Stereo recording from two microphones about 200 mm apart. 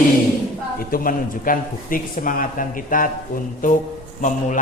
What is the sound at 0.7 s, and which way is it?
A man's voice, 45° left (ahead or behind).